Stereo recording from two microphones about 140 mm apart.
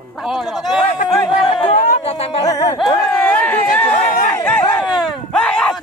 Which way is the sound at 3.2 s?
10° left (ahead or behind).